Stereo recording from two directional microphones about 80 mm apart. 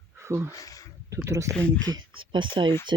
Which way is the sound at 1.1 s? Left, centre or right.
Right.